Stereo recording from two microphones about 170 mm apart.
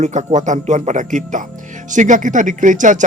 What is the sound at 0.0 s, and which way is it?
Speech, 45° right (ahead or behind).